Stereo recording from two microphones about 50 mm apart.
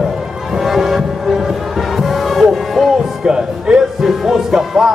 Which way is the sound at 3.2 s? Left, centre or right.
Centre.